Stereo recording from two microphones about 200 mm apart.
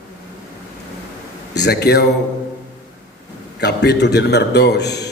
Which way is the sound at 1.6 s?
55° left (ahead or behind).